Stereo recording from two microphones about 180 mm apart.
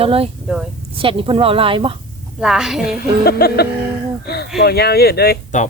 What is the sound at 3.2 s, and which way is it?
Speech, 60° left (ahead or behind).